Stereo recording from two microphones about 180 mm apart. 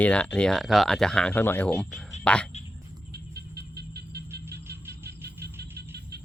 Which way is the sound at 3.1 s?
60° right (ahead or behind).